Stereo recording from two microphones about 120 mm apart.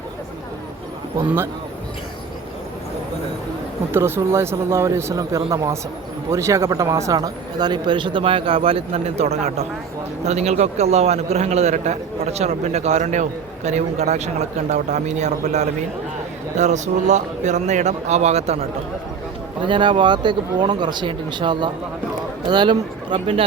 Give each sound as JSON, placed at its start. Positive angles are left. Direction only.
{"t": 3.9, "sound": "a man's voice", "side_deg": -20}
{"t": 19.6, "sound": "speech", "side_deg": -40}